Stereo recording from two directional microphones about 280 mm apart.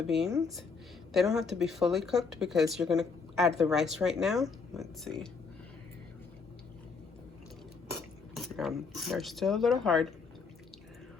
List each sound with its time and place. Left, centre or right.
0.0 s speech: centre
0.3 s speech: centre
1.1 s speech: centre
8.4 s speech: centre